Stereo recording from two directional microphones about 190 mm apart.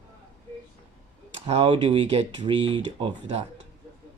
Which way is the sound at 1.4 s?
30° right (ahead or behind).